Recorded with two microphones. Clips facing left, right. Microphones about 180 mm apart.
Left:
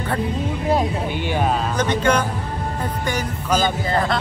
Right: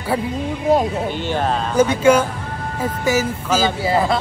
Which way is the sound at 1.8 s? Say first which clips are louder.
Right 8 dB; 5° right (ahead or behind).